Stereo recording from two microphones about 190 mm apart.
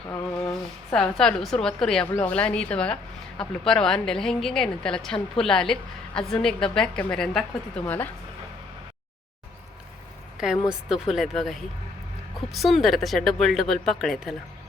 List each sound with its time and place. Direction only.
0.4 s a woman's voice: 5° left (ahead or behind)
10.3 s a woman's voice: 5° right (ahead or behind)